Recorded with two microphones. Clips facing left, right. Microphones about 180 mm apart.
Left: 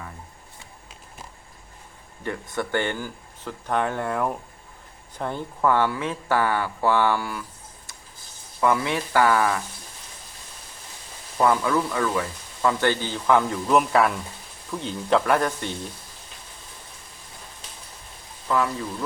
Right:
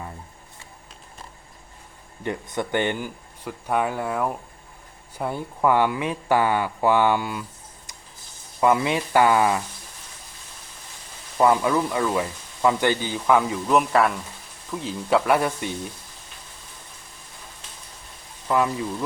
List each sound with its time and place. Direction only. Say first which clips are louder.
2.2 s speech: right 1 dB; 20° right (ahead or behind)
7.9 s a sound: even; 15° right (ahead or behind)
8.6 s speech: right 2 dB; 20° right (ahead or behind)
11.4 s speech: right 2 dB; 20° right (ahead or behind)
13.3 s speech: even; centre (ahead or behind)
18.4 s speech: right 2 dB; 20° right (ahead or behind)